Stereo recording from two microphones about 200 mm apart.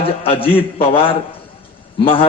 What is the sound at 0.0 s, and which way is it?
A man's voice, 30° left (ahead or behind).